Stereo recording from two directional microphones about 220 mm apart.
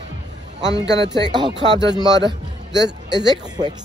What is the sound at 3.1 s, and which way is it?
Speech, 20° right (ahead or behind).